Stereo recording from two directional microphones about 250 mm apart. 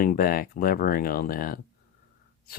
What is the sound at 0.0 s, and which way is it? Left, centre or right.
Speech, left.